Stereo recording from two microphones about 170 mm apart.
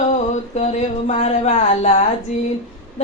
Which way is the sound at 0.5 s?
40° left (ahead or behind).